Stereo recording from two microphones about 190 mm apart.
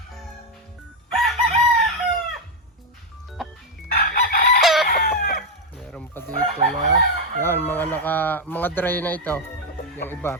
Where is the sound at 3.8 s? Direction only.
50° left (ahead or behind).